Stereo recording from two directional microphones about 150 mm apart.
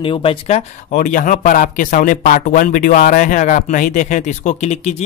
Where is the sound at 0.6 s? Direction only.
60° left (ahead or behind).